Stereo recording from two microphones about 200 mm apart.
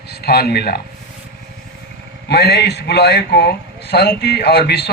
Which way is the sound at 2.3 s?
55° left (ahead or behind).